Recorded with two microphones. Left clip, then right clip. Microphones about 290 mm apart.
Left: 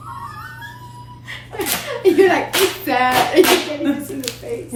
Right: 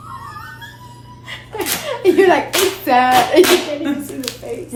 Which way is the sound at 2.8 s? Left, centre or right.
Centre.